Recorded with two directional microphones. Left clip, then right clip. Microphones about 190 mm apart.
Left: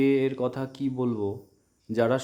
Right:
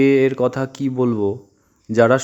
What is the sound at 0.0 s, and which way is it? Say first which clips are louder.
Speech: right 9 dB; 25° right (ahead or behind).